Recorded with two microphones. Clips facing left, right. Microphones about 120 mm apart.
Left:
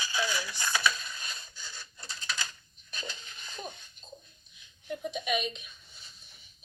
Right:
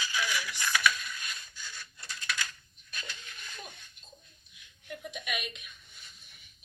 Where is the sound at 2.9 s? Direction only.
30° left (ahead or behind).